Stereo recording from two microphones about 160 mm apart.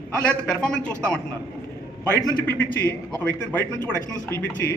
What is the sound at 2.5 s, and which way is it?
Speech, 10° left (ahead or behind).